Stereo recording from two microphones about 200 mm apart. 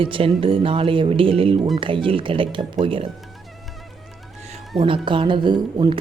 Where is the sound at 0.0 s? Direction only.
25° right (ahead or behind).